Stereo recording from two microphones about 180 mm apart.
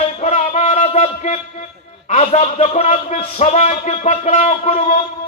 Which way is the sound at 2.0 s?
40° left (ahead or behind).